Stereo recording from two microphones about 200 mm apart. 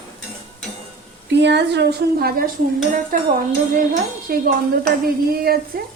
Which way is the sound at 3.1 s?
40° right (ahead or behind).